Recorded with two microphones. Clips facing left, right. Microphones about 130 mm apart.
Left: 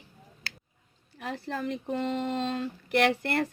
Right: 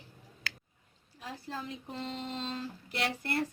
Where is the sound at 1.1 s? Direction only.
70° left (ahead or behind).